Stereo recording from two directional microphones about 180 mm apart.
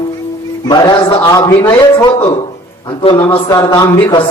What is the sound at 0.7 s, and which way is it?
A man's voice, 25° left (ahead or behind).